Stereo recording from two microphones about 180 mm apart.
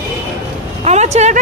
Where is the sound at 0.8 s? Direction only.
40° right (ahead or behind).